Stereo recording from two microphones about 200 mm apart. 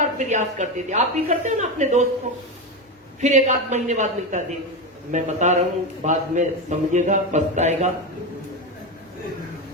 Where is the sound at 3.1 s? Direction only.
35° right (ahead or behind).